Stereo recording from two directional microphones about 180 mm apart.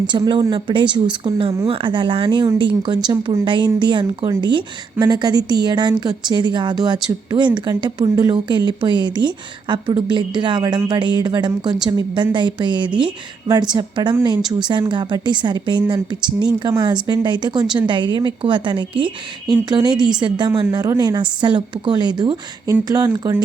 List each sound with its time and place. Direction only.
0.1 s a woman's voice: 25° right (ahead or behind)